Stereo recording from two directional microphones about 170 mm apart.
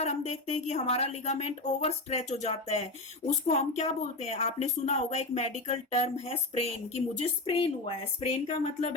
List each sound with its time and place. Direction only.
0.0 s speech: 40° left (ahead or behind)